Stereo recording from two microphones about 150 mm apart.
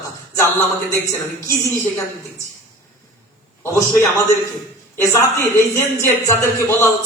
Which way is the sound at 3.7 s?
15° left (ahead or behind).